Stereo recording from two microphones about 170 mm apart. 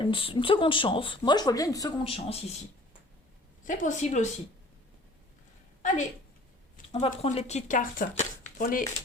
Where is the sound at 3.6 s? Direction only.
50° left (ahead or behind).